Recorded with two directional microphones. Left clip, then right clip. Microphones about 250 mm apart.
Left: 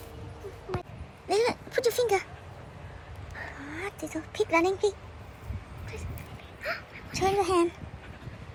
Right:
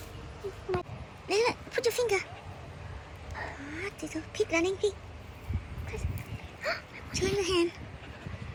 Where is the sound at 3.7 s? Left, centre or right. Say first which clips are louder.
Left 2 dB; centre.